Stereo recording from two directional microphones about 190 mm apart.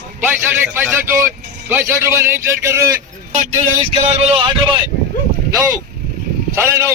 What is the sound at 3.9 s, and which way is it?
Speech, 30° right (ahead or behind).